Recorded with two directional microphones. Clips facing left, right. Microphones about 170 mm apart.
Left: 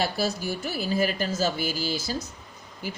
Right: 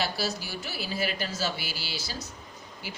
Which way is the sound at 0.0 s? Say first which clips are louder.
Left 4 dB; 50° left (ahead or behind).